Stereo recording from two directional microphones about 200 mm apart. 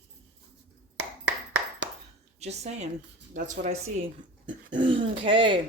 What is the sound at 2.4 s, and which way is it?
Speech, 35° right (ahead or behind).